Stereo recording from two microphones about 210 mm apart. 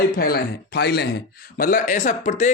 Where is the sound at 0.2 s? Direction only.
50° left (ahead or behind).